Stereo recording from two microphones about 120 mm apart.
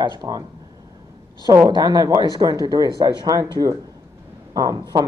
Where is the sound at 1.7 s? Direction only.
35° right (ahead or behind).